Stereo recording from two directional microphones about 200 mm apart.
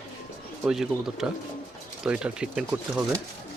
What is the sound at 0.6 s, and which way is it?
Speech, 5° right (ahead or behind).